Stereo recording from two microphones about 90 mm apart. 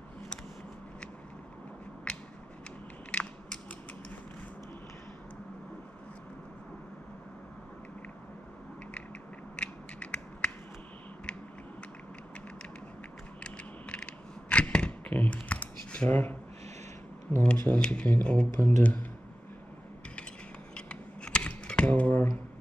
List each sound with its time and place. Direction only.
3.1 s biting: 15° left (ahead or behind)
9.6 s mechanisms: 10° left (ahead or behind)
13.4 s mechanisms: 10° left (ahead or behind)
14.5 s computer keyboard: 10° left (ahead or behind)
17.4 s speech: 15° left (ahead or behind)
20.7 s a sound: 10° left (ahead or behind)